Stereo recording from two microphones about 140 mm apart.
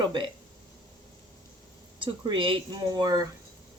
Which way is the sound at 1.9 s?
35° right (ahead or behind).